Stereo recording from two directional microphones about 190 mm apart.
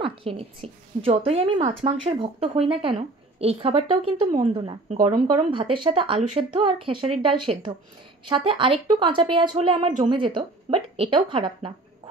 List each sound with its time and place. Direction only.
0.0 s a woman's voice: 30° right (ahead or behind)